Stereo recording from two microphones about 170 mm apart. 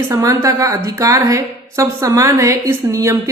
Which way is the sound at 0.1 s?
20° right (ahead or behind).